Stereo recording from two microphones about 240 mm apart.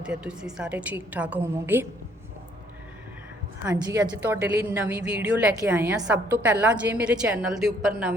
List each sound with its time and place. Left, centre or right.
0.0 s a woman's voice: centre
3.6 s a woman's voice: centre